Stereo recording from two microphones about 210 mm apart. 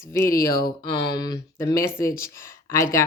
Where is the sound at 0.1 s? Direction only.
15° left (ahead or behind).